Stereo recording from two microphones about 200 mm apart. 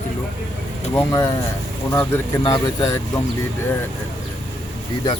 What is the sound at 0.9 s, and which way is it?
Speech, 15° left (ahead or behind).